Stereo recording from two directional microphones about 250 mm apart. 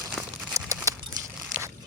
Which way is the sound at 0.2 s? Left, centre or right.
Centre.